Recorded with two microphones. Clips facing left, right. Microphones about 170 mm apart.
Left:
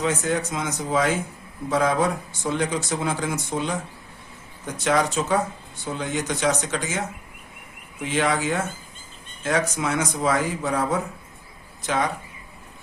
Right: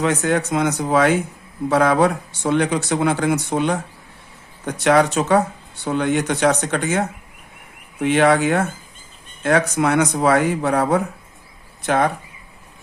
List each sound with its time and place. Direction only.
0.0 s speech: 65° right (ahead or behind)